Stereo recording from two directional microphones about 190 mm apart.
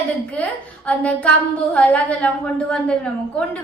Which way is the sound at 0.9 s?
5° left (ahead or behind).